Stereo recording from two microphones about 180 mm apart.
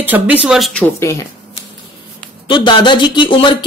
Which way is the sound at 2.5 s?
25° left (ahead or behind).